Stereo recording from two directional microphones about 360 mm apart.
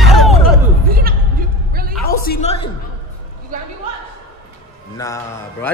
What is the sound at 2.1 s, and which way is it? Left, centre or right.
Speech, left.